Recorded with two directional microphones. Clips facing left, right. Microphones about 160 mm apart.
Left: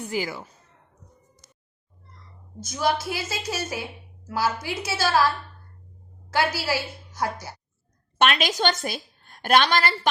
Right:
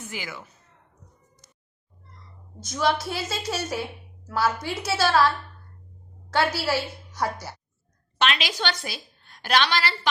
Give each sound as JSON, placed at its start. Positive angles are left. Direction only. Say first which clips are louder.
{"t": 0.0, "sound": "speech", "louder": "left 8 dB", "side_deg": 35}
{"t": 2.6, "sound": "a woman's voice", "louder": "even", "side_deg": 0}
{"t": 6.3, "sound": "a woman's voice", "louder": "right 1 dB", "side_deg": 0}
{"t": 8.2, "sound": "a woman's voice", "louder": "left 4 dB", "side_deg": 50}